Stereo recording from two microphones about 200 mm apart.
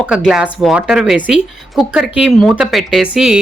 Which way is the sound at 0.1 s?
5° right (ahead or behind).